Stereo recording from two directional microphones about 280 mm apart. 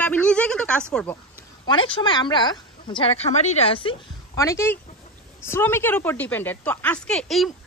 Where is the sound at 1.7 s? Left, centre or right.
Centre.